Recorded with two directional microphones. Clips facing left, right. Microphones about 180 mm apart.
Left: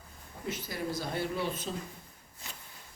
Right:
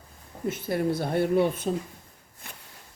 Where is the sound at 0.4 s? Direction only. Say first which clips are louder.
Right 9 dB; 55° right (ahead or behind).